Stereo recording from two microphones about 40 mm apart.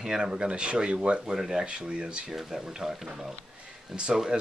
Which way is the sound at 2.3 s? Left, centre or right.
Centre.